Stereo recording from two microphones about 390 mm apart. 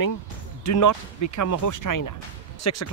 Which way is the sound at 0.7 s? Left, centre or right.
Left.